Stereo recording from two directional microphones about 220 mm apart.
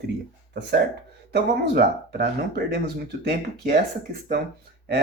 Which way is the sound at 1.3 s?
50° right (ahead or behind).